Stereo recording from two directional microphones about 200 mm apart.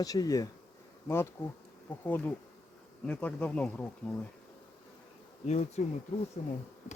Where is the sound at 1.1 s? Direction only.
15° left (ahead or behind).